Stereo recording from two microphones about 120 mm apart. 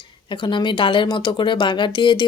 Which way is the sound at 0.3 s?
40° left (ahead or behind).